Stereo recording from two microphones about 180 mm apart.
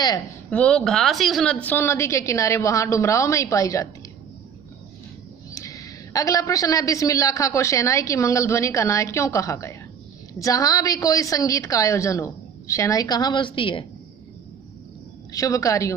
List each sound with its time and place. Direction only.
0.5 s a woman's voice: 5° left (ahead or behind)
5.5 s a woman's voice: 20° left (ahead or behind)
15.3 s a woman's voice: 20° left (ahead or behind)